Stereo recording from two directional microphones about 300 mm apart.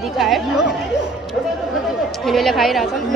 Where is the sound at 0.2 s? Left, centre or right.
Centre.